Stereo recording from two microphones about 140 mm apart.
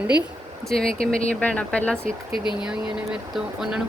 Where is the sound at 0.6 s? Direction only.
5° left (ahead or behind).